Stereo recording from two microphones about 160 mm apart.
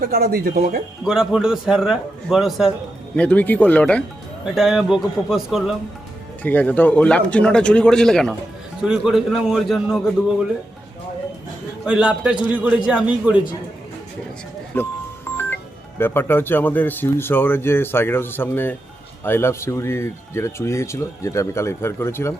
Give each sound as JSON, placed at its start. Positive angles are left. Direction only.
{"t": 0.0, "sound": "speech", "side_deg": -70}
{"t": 1.0, "sound": "a man's voice", "side_deg": -5}
{"t": 3.2, "sound": "a man's voice", "side_deg": 10}
{"t": 6.4, "sound": "a man's voice", "side_deg": 10}
{"t": 11.9, "sound": "a man's voice", "side_deg": -5}
{"t": 14.7, "sound": "speech", "side_deg": 15}
{"t": 16.0, "sound": "speech", "side_deg": 15}